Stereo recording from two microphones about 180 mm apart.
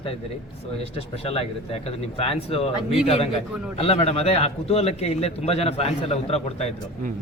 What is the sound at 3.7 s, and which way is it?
A man's voice, 35° left (ahead or behind).